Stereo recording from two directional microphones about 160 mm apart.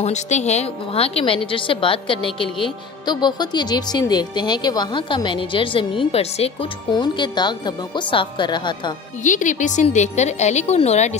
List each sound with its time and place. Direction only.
0.0 s a woman's voice: 45° left (ahead or behind)
6.9 s a woman's voice: 25° left (ahead or behind)
9.2 s a woman's voice: 50° left (ahead or behind)